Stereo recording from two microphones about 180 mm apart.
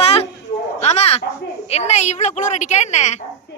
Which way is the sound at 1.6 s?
35° left (ahead or behind).